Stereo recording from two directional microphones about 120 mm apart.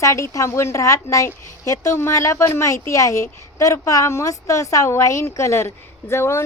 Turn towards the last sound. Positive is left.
turn(degrees=20)  # may be behind; listen again after turning